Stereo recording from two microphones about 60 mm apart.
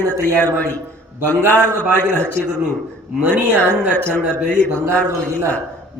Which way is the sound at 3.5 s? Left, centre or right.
Left.